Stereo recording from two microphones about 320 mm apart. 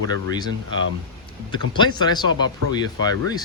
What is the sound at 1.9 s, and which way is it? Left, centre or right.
Speech, centre.